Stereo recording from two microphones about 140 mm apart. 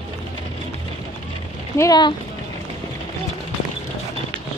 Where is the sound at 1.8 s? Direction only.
30° left (ahead or behind).